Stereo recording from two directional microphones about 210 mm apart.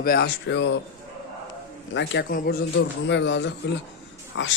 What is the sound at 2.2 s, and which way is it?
A man's voice, 55° left (ahead or behind).